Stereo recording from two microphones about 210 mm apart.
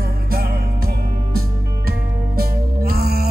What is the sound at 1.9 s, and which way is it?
Music, 45° right (ahead or behind).